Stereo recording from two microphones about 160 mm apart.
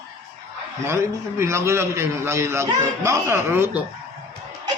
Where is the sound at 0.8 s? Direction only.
15° right (ahead or behind).